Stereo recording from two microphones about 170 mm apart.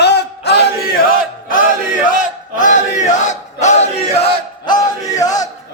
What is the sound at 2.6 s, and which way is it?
Battle cry, 45° left (ahead or behind).